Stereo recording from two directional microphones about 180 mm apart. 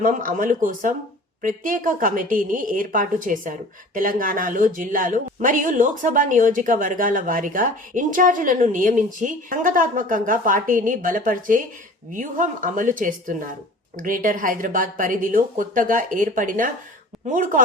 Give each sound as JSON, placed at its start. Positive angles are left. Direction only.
{"t": 0.0, "sound": "a woman's voice", "side_deg": -45}